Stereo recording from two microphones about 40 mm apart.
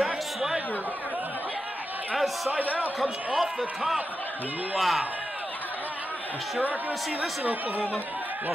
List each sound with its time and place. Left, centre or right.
0.0 s chatter: centre
2.1 s a man's voice: centre